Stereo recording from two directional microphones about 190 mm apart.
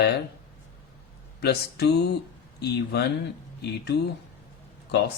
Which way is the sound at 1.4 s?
60° left (ahead or behind).